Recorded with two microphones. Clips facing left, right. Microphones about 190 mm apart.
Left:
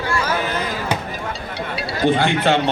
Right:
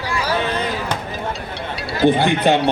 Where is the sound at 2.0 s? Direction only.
15° right (ahead or behind).